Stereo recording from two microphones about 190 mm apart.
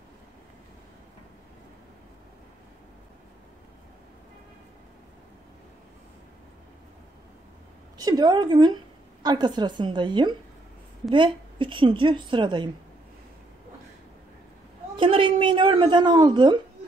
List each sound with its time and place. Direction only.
8.0 s a woman's voice: 20° right (ahead or behind)
15.0 s a woman's voice: 25° right (ahead or behind)